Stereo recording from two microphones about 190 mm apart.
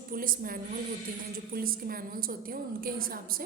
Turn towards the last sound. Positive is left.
turn(degrees=-50)  # may be behind; listen again after turning